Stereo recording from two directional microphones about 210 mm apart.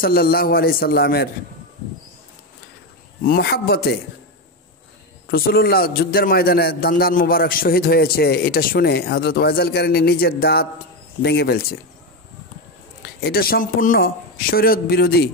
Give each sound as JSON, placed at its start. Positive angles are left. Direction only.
{"t": 0.0, "sound": "a man's voice", "side_deg": 45}
{"t": 3.3, "sound": "a man's voice", "side_deg": 45}
{"t": 5.3, "sound": "a man's voice", "side_deg": 45}
{"t": 13.0, "sound": "a man's voice", "side_deg": 45}